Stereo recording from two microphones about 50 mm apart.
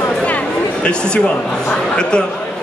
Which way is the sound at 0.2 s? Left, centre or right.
Left.